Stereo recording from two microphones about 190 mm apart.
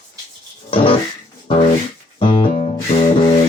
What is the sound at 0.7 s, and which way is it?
Music, 30° left (ahead or behind).